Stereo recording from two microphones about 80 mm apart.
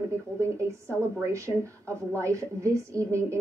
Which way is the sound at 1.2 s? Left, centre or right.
Right.